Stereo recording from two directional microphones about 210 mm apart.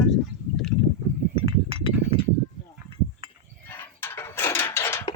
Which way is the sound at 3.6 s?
10° left (ahead or behind).